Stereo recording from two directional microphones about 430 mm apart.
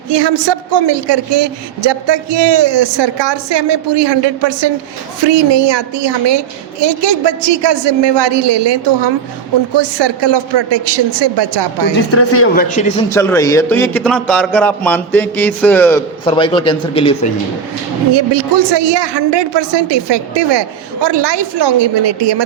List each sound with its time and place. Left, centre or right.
0.1 s a woman's voice: right
12.1 s speech: left
12.6 s a man's voice: centre
18.1 s a woman's voice: right